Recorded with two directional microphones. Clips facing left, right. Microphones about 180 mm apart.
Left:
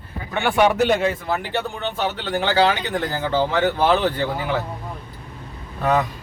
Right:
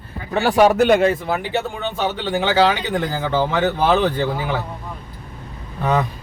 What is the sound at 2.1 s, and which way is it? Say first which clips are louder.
Speech: right 3 dB; 10° right (ahead or behind).